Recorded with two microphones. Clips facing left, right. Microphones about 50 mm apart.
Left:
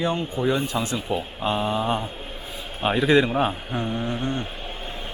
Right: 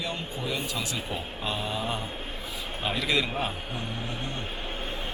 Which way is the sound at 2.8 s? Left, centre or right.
Left.